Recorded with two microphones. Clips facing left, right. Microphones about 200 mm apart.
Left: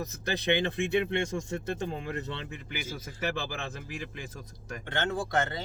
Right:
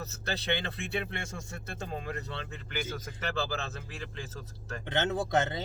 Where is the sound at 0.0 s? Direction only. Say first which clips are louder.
Left 4 dB; 15° left (ahead or behind).